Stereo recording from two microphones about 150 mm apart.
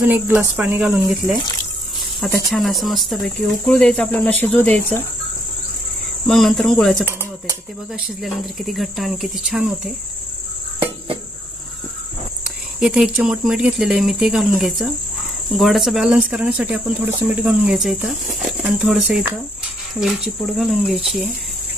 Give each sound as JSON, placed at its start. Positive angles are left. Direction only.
{"t": 0.1, "sound": "speech", "side_deg": -15}
{"t": 2.2, "sound": "speech", "side_deg": 0}
{"t": 6.2, "sound": "speech", "side_deg": 0}
{"t": 7.0, "sound": "speech", "side_deg": -15}
{"t": 7.9, "sound": "speech", "side_deg": -5}
{"t": 12.8, "sound": "speech", "side_deg": -5}